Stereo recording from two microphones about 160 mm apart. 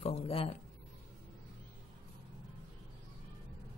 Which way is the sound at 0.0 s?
35° left (ahead or behind).